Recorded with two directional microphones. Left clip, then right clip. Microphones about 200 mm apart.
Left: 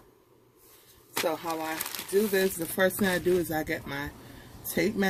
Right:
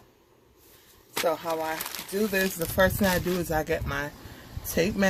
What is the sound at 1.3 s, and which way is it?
Speech, 10° right (ahead or behind).